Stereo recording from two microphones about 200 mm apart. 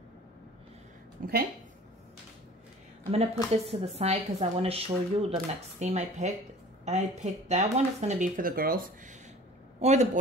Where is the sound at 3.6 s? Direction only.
30° right (ahead or behind); by 8.8 s 45° right (ahead or behind).